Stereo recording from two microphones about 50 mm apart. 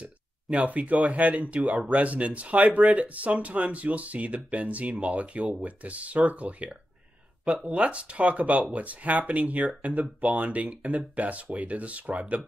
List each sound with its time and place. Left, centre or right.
0.0 s speech: right